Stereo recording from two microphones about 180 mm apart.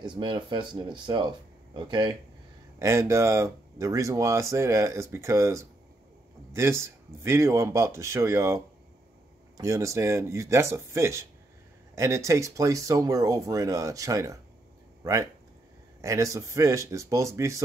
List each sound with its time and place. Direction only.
0.1 s speech: 25° right (ahead or behind)
16.0 s speech: 15° right (ahead or behind)